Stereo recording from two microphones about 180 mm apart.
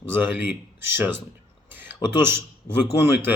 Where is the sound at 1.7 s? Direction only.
10° right (ahead or behind).